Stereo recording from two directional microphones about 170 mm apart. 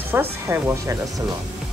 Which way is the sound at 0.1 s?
15° right (ahead or behind).